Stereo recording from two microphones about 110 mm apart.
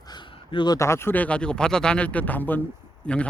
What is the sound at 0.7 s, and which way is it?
Speech, 25° left (ahead or behind).